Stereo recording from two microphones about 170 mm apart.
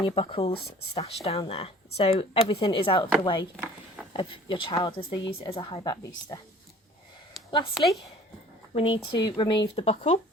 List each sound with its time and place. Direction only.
0.0 s speech: 30° left (ahead or behind)
4.1 s speech: 30° left (ahead or behind)
7.7 s speech: centre (ahead or behind)
8.7 s speech: 30° left (ahead or behind)